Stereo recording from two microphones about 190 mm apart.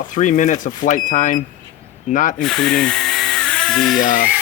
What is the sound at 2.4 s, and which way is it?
Drill, centre (ahead or behind).